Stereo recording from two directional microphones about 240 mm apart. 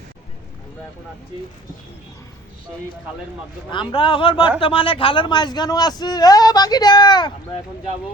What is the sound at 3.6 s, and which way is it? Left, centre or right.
A man's voice, left.